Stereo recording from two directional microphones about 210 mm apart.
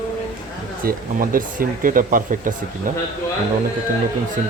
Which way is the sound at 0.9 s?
40° right (ahead or behind).